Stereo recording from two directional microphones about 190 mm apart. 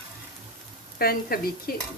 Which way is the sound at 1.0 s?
50° left (ahead or behind).